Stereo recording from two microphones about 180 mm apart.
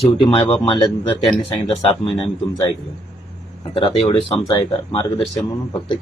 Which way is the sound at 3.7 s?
30° left (ahead or behind).